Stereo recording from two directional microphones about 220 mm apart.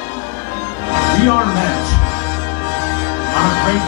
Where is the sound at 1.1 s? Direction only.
25° left (ahead or behind).